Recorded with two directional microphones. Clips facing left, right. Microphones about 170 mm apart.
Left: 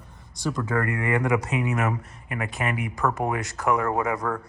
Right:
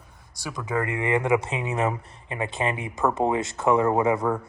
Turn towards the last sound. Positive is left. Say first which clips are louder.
# right 4 dB
turn(degrees=-25)  # may be behind; listen again after turning